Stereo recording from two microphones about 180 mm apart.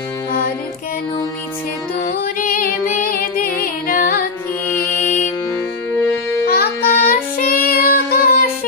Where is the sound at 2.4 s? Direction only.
50° left (ahead or behind).